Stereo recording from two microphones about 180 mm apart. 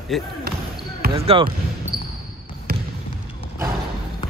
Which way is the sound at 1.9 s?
25° right (ahead or behind).